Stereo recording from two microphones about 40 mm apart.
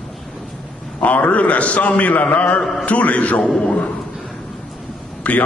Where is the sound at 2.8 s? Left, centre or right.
Left.